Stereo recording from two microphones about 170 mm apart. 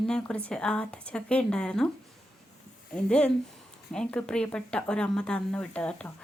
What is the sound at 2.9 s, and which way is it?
A woman's voice, 5° left (ahead or behind).